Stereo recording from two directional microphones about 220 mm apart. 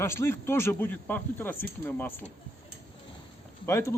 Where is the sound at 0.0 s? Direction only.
10° left (ahead or behind).